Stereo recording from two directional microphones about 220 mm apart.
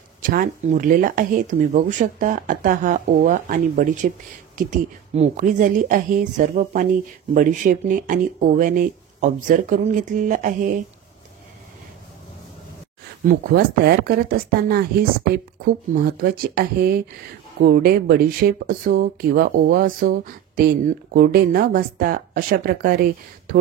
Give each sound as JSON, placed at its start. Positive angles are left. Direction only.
{"t": 0.2, "sound": "speech", "side_deg": -40}
{"t": 13.2, "sound": "speech", "side_deg": -45}